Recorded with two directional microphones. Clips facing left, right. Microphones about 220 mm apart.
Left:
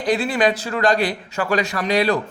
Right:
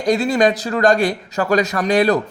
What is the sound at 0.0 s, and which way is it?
A man's voice, 45° right (ahead or behind).